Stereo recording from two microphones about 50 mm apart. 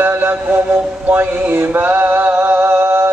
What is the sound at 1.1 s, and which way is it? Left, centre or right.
Male singing, right.